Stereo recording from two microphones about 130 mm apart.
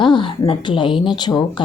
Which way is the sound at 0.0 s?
40° left (ahead or behind).